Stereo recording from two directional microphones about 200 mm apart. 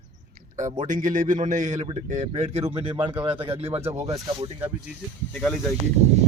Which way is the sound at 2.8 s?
25° right (ahead or behind).